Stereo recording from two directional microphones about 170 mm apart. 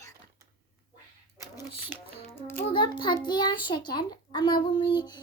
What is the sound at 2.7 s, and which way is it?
A child's voice, 25° left (ahead or behind).